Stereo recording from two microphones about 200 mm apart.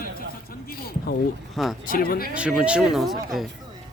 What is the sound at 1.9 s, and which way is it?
Speech, 45° left (ahead or behind).